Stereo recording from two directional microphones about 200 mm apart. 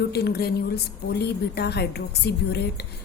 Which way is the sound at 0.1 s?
55° left (ahead or behind).